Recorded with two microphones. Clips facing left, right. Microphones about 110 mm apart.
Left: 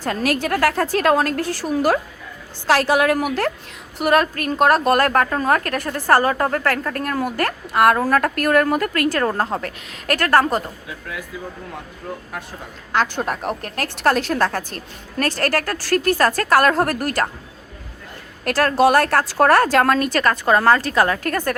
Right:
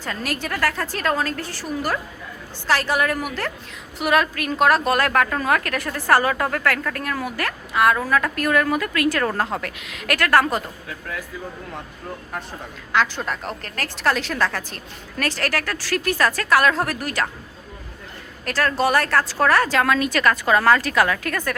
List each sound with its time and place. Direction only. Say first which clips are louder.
0.0 s a woman's voice: left 7 dB; 55° left (ahead or behind)
2.6 s a woman's voice: left 5 dB; 80° left; by 3.5 s 55° left (ahead or behind)
4.0 s a woman's voice: left 3 dB; 40° left (ahead or behind)
13.1 s speech: left 4 dB; 45° left (ahead or behind)
13.4 s a woman's voice: left 6 dB; 15° left (ahead or behind)
13.7 s speech: left 3 dB; 55° left (ahead or behind)
18.4 s speech: left 5 dB; 55° left (ahead or behind)
20.1 s a woman's voice: left 2 dB; 30° left (ahead or behind)